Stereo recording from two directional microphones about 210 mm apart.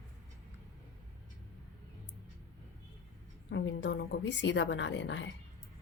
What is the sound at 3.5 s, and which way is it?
A woman's voice, 60° left (ahead or behind).